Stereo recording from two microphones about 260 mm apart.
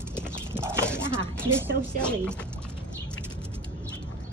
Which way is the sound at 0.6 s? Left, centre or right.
Centre.